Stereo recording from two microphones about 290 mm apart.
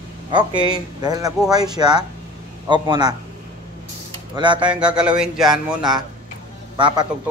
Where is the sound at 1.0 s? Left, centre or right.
Centre.